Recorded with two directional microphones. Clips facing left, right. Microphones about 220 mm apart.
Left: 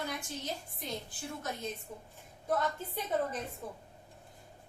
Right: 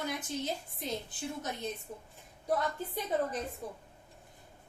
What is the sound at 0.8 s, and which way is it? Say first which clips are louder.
Speech: right 3 dB; 20° right (ahead or behind).